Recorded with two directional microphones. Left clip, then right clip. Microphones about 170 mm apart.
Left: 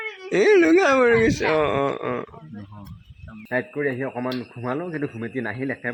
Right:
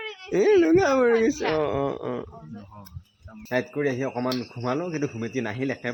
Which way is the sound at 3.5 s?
10° right (ahead or behind).